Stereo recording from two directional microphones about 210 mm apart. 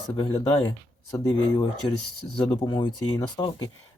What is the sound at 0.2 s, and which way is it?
Speech, 25° left (ahead or behind).